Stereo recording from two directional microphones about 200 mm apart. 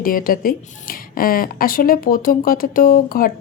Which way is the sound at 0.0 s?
45° left (ahead or behind).